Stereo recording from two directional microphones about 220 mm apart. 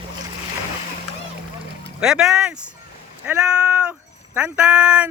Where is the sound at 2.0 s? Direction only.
5° right (ahead or behind).